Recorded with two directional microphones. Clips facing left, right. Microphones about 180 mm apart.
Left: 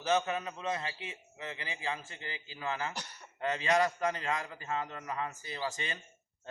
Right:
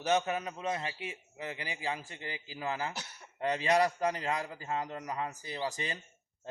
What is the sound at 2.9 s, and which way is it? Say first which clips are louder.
Speech: even; 10° right (ahead or behind).